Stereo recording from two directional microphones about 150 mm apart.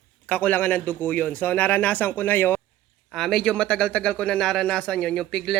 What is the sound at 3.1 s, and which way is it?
Speech, centre (ahead or behind).